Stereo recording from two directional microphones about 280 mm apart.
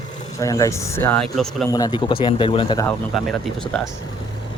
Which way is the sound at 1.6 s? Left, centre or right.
Centre.